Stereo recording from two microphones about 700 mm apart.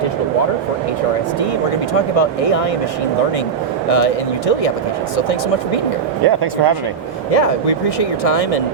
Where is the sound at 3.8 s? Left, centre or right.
Left.